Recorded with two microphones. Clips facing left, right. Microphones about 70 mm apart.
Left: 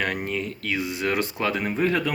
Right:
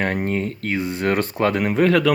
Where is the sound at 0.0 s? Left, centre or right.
Right.